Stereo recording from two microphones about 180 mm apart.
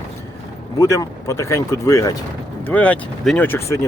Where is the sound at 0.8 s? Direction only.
15° left (ahead or behind).